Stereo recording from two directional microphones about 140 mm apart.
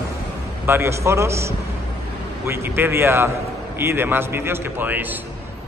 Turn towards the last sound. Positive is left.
turn(degrees=-15)  # may be behind; listen again after turning